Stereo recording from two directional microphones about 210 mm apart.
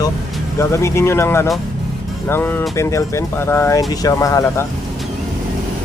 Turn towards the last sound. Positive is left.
turn(degrees=15)  # may be behind; listen again after turning